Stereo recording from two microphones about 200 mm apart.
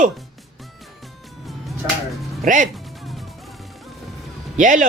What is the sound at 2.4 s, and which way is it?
Speech, 40° right (ahead or behind).